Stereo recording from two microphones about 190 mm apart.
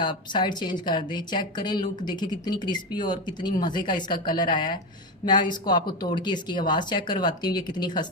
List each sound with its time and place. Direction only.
0.0 s speech: 25° left (ahead or behind)